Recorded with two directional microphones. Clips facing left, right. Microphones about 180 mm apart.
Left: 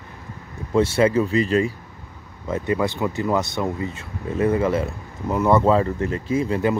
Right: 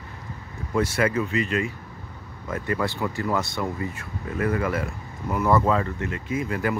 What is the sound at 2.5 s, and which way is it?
Speech, 20° left (ahead or behind).